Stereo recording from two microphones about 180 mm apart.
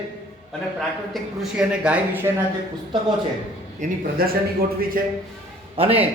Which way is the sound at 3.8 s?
55° right (ahead or behind).